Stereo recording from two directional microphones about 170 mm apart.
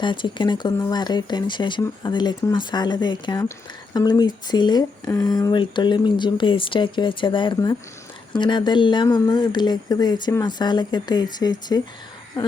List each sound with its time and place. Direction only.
0.0 s speech: 30° left (ahead or behind)